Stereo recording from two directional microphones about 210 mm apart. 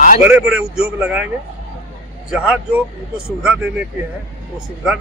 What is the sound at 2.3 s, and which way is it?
Speech, 5° right (ahead or behind).